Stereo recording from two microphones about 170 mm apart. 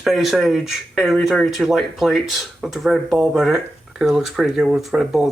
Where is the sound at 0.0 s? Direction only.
Centre (ahead or behind).